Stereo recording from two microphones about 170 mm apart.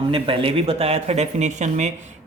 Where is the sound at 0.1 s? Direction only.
35° right (ahead or behind).